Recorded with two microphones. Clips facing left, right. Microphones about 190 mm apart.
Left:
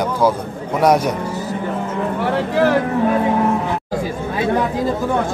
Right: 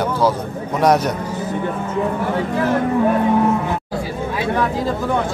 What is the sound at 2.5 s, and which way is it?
Speech, 80° left.